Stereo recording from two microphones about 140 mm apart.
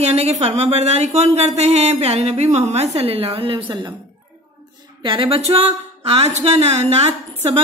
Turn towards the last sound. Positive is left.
turn(degrees=-50)  # may be behind; listen again after turning